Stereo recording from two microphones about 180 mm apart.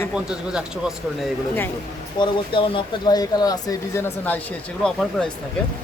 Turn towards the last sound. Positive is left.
turn(degrees=5)  # may be behind; listen again after turning